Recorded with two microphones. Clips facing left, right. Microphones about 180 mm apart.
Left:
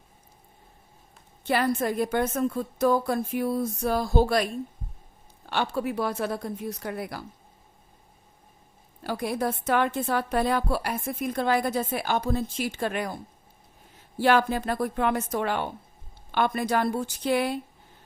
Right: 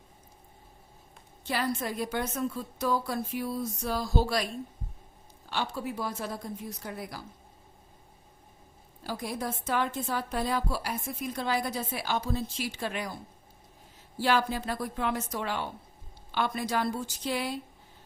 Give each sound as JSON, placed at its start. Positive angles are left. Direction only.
{"t": 1.5, "sound": "a woman's voice", "side_deg": 55}
{"t": 5.5, "sound": "a woman's voice", "side_deg": 60}
{"t": 9.0, "sound": "a woman's voice", "side_deg": 65}
{"t": 14.2, "sound": "a woman's voice", "side_deg": 55}